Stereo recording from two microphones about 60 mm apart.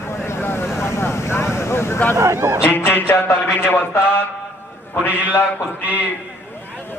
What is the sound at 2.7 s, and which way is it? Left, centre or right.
Speech, left.